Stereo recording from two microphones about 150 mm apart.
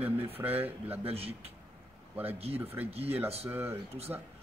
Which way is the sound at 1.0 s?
40° right (ahead or behind).